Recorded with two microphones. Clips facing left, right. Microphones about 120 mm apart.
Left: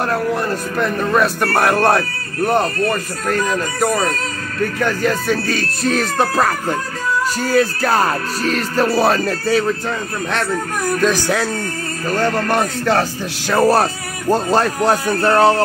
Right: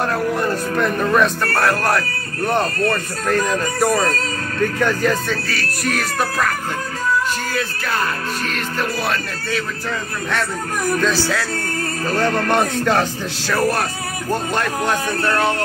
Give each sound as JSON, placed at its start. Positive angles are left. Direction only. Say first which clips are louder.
{"t": 0.3, "sound": "speech", "louder": "even", "side_deg": 0}
{"t": 1.4, "sound": "speech", "louder": "left 4 dB", "side_deg": 20}
{"t": 2.4, "sound": "speech", "louder": "left 2 dB", "side_deg": 10}
{"t": 3.3, "sound": "speech", "louder": "even", "side_deg": 0}
{"t": 5.3, "sound": "speech", "louder": "left 5 dB", "side_deg": 20}
{"t": 7.5, "sound": "music", "louder": "left 8 dB", "side_deg": 40}
{"t": 11.0, "sound": "speech", "louder": "left 5 dB", "side_deg": 15}
{"t": 12.2, "sound": "speech", "louder": "even", "side_deg": 5}
{"t": 13.5, "sound": "speech", "louder": "left 6 dB", "side_deg": 30}
{"t": 14.3, "sound": "music", "louder": "left 6 dB", "side_deg": 35}